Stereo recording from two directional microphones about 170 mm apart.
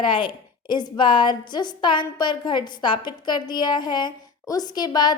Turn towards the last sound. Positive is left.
turn(degrees=25)  # may be behind; listen again after turning